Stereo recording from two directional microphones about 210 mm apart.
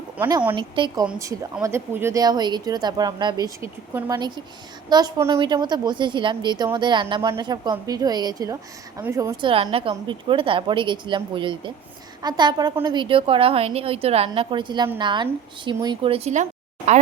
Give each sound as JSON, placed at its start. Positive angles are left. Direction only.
{"t": 0.2, "sound": "speech", "side_deg": -10}
{"t": 0.5, "sound": "a woman's voice", "side_deg": -20}
{"t": 9.5, "sound": "a woman's voice", "side_deg": -25}